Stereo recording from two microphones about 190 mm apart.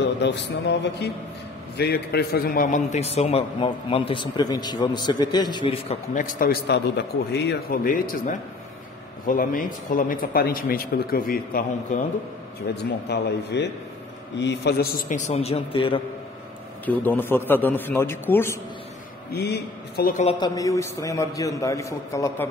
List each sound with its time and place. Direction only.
0.2 s a man's voice: 65° left (ahead or behind); by 5.9 s 30° left (ahead or behind)
6.1 s speech: 45° left (ahead or behind)
12.7 s a man's voice: 60° left (ahead or behind); by 16.0 s 30° left (ahead or behind)
16.8 s a man's voice: 10° left (ahead or behind)
19.3 s a man's voice: 60° left (ahead or behind)
20.2 s a man's voice: 20° left (ahead or behind)